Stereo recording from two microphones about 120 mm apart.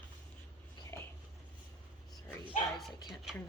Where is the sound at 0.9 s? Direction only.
20° left (ahead or behind).